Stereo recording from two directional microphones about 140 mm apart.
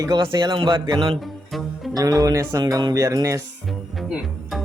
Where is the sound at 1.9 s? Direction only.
25° right (ahead or behind).